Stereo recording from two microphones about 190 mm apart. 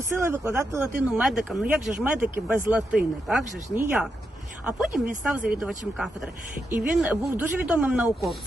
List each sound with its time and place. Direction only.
0.2 s speech: 15° right (ahead or behind)
1.1 s speech: centre (ahead or behind)